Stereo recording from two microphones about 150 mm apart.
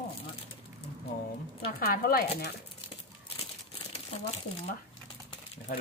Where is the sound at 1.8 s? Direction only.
85° left.